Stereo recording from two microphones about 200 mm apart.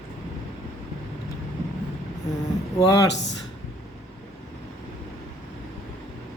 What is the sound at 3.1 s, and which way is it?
Speech, 60° left (ahead or behind).